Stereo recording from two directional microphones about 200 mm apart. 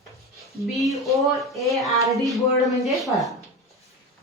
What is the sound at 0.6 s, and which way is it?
Speech, centre (ahead or behind).